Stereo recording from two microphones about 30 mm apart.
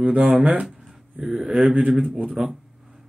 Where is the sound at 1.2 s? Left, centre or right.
Right.